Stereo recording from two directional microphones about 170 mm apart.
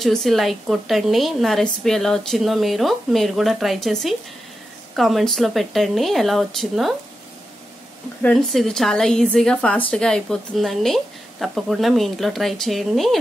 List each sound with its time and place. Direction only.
0.0 s a woman's voice: centre (ahead or behind)
8.2 s a woman's voice: 5° left (ahead or behind)